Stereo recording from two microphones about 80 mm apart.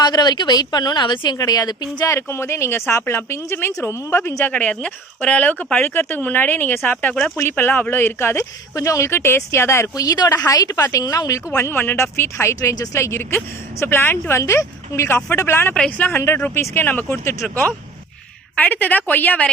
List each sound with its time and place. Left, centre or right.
0.0 s speech: left
1.4 s speech: left
2.0 s speech: left
4.5 s speech: centre; by 8.4 s left
8.7 s a woman's voice: left
15.7 s speech: centre
16.0 s speech: left